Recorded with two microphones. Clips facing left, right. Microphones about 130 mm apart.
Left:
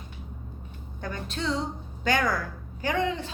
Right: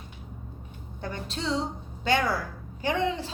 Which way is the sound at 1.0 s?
25° right (ahead or behind).